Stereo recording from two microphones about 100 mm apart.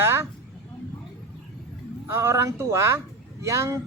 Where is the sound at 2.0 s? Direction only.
25° right (ahead or behind).